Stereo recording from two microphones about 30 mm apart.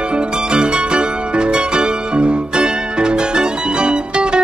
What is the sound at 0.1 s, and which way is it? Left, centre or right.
Music, right.